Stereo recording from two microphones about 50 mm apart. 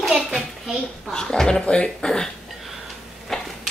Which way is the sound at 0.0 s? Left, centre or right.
Centre.